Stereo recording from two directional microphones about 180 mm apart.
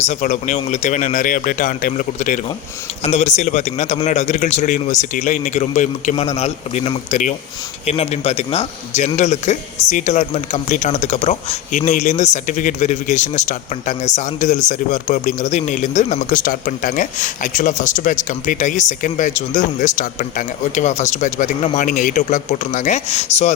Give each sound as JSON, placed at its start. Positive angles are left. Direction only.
{"t": 0.1, "sound": "a man's voice", "side_deg": 40}